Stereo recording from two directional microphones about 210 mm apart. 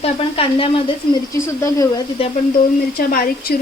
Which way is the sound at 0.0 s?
25° left (ahead or behind).